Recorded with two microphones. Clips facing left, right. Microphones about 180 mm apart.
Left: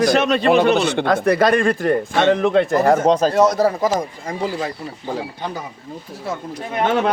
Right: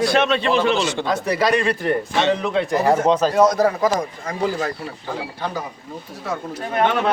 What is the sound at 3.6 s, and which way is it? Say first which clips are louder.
Speech: left 1 dB; 25° left (ahead or behind).